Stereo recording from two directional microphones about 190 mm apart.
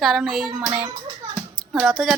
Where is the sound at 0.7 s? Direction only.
25° right (ahead or behind).